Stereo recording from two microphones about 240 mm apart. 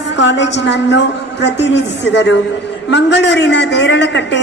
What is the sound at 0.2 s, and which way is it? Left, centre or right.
A woman's voice, left.